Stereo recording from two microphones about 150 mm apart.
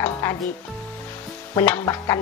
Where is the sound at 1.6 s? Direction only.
20° left (ahead or behind).